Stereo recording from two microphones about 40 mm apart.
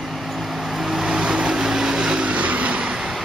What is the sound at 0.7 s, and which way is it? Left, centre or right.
Vehicle, centre.